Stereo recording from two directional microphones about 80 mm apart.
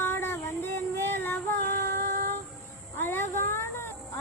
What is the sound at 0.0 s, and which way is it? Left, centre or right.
Child singing, left.